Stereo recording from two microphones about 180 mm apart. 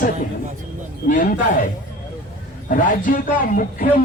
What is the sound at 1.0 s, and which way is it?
Speech, 50° left (ahead or behind).